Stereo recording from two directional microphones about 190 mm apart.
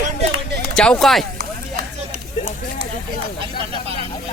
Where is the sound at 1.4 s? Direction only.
55° right (ahead or behind).